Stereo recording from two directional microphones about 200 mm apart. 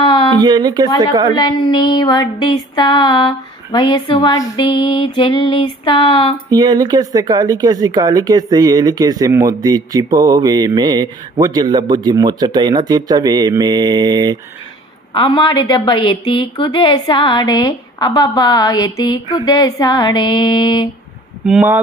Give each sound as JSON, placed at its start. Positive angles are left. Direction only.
{"t": 0.0, "sound": "a sound", "side_deg": 25}
{"t": 0.4, "sound": "speech", "side_deg": -20}
{"t": 1.4, "sound": "a woman's voice", "side_deg": 20}
{"t": 6.5, "sound": "speech", "side_deg": -20}
{"t": 15.1, "sound": "a woman's voice", "side_deg": 20}
{"t": 21.4, "sound": "speech", "side_deg": -5}